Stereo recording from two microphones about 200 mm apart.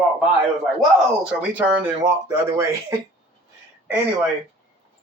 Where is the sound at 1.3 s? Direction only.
5° right (ahead or behind).